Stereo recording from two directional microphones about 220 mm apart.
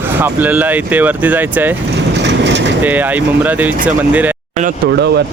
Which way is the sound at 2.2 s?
50° right (ahead or behind).